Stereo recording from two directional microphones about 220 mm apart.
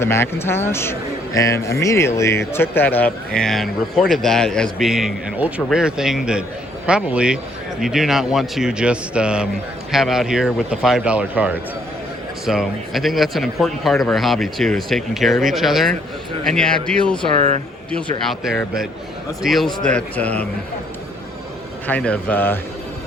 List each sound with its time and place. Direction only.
0.0 s a man's voice: 10° left (ahead or behind)
17.3 s speech: 30° right (ahead or behind)
18.3 s speech: centre (ahead or behind)
21.8 s a man's voice: 5° left (ahead or behind)